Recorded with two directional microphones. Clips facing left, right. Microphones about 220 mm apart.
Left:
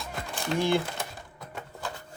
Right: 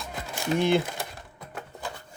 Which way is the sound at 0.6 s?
20° right (ahead or behind).